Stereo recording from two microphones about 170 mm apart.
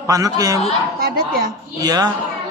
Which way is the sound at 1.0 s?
60° right (ahead or behind).